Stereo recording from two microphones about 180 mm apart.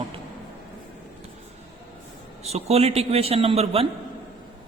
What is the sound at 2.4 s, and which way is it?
A man's voice, 35° right (ahead or behind).